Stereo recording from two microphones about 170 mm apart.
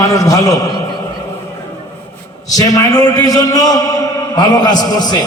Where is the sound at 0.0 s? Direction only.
20° left (ahead or behind).